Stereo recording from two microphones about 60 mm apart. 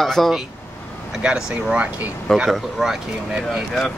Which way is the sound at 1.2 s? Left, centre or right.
Centre.